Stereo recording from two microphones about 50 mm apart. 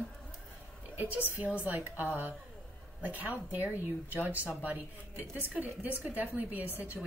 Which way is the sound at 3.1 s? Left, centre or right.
Right.